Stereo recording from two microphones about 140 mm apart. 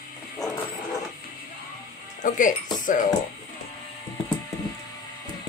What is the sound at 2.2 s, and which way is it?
Speech, 70° left (ahead or behind).